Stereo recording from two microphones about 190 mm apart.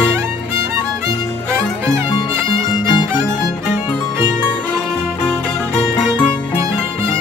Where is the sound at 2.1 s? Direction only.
25° left (ahead or behind).